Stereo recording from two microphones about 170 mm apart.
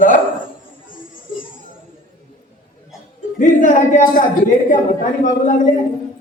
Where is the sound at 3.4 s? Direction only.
50° left (ahead or behind).